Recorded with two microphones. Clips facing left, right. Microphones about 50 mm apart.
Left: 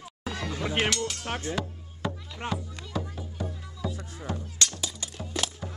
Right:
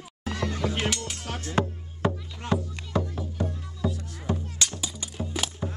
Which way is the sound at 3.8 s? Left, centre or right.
Left.